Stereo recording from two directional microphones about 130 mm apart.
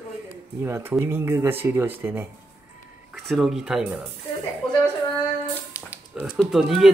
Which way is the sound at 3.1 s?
Centre (ahead or behind).